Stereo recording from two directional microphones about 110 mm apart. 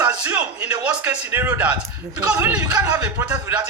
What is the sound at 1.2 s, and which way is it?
A man's voice, 20° right (ahead or behind).